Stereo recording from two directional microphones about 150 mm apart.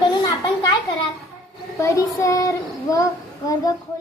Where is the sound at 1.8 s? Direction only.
20° left (ahead or behind).